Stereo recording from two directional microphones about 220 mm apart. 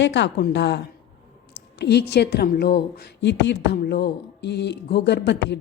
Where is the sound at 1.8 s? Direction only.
50° left (ahead or behind).